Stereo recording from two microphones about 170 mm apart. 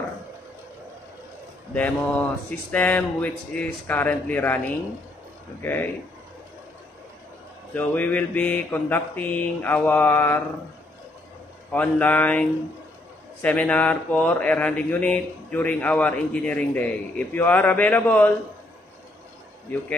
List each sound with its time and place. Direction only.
1.7 s speech: 10° left (ahead or behind)
7.7 s speech: 10° left (ahead or behind)
11.7 s speech: 10° left (ahead or behind)